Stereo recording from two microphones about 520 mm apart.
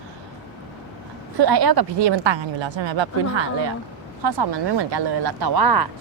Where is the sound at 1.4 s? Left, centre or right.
Right.